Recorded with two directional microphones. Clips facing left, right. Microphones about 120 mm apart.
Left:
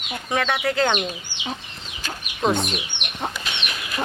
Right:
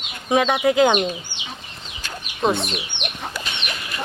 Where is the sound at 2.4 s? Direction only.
Centre (ahead or behind).